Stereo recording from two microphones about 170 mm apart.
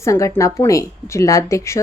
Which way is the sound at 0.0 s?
20° left (ahead or behind).